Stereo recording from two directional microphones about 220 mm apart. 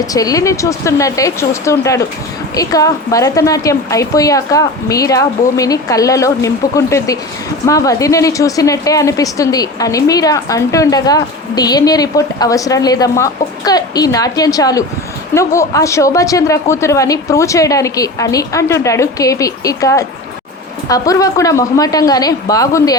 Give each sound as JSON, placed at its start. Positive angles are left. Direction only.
{"t": 0.1, "sound": "a woman's voice", "side_deg": 15}